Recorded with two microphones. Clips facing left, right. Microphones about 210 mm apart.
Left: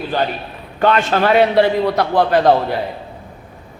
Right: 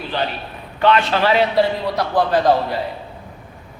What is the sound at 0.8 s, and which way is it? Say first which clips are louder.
A man's voice: left 1 dB; 45° left (ahead or behind).